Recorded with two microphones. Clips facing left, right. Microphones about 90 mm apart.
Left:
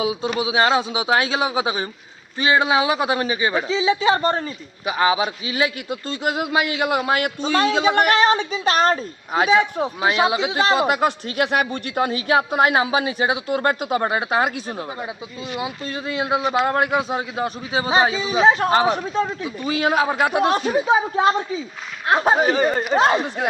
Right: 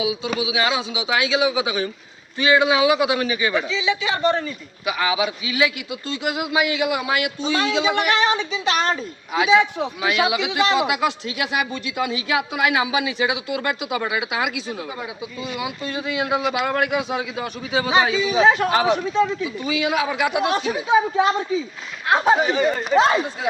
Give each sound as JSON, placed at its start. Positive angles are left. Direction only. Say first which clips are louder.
{"t": 0.0, "sound": "a man's voice", "louder": "left 1 dB", "side_deg": 40}
{"t": 14.8, "sound": "a man's voice", "louder": "left 1 dB", "side_deg": 30}
{"t": 19.4, "sound": "a man's voice", "louder": "left 1 dB", "side_deg": 45}
{"t": 22.4, "sound": "a man's voice", "louder": "left 2 dB", "side_deg": 45}